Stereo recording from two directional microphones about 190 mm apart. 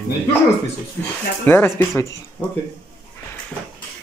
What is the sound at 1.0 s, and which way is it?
Speech, 10° left (ahead or behind).